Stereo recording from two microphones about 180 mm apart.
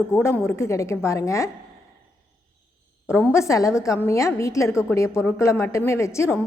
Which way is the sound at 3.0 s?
15° left (ahead or behind).